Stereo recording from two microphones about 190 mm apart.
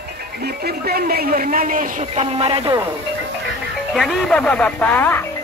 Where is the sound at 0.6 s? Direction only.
50° right (ahead or behind); by 2.6 s 30° right (ahead or behind).